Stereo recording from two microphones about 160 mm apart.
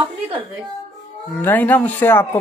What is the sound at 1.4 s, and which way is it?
Speech, 10° left (ahead or behind).